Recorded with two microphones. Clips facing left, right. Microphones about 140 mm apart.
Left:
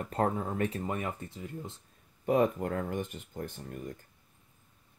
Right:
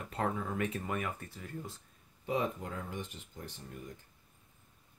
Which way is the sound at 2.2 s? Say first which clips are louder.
Left 8 dB; 55° left (ahead or behind).